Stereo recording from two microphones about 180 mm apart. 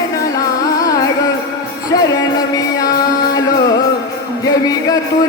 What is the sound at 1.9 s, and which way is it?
Music, 20° left (ahead or behind).